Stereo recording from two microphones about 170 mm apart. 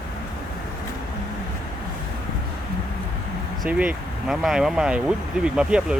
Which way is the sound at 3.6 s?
5° right (ahead or behind).